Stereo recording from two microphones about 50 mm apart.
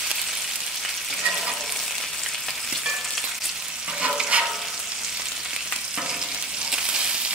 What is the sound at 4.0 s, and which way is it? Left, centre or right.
Frying, right.